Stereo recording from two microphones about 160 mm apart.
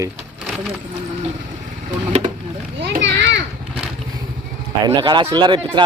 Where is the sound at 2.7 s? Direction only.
90° right.